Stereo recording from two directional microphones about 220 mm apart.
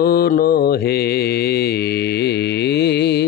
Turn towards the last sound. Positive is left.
turn(degrees=50)  # may be behind; listen again after turning